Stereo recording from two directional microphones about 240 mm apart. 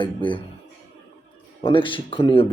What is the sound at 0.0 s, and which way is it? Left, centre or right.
Speech, left.